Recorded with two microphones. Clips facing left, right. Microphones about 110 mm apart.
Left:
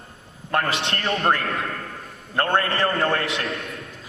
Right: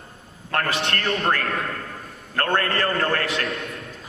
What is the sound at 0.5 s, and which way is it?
A man's voice, 25° left (ahead or behind).